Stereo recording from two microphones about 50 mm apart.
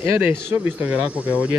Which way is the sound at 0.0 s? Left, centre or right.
Right.